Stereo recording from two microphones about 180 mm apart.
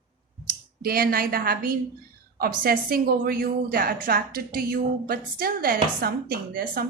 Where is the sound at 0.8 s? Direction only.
55° right (ahead or behind).